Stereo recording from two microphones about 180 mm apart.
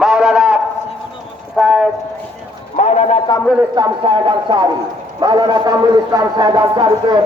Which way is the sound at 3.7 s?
25° right (ahead or behind).